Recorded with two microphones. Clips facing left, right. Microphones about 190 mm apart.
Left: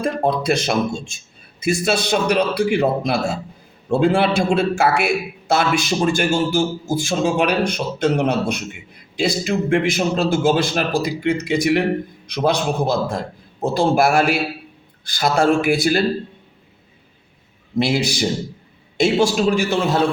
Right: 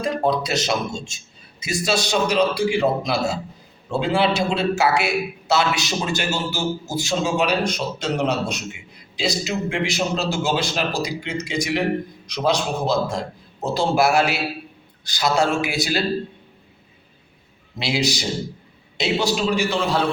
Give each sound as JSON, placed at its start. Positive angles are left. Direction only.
{"t": 0.0, "sound": "a man's voice", "side_deg": 55}
{"t": 17.7, "sound": "a man's voice", "side_deg": 50}